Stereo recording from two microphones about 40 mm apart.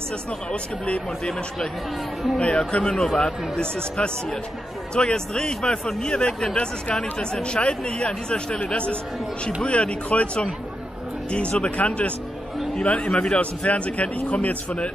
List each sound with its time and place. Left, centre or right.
0.5 s a man's voice: left
2.3 s a man's voice: left